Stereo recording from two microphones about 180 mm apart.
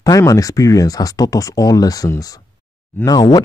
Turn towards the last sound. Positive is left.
turn(degrees=20)  # may be behind; listen again after turning